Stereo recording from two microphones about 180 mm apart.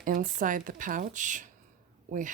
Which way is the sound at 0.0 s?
50° right (ahead or behind).